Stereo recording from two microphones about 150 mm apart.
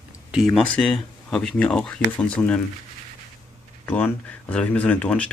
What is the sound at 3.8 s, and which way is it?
Speech, 10° left (ahead or behind).